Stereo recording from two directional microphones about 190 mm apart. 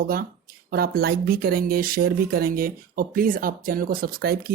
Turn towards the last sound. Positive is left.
turn(degrees=-50)  # may be behind; listen again after turning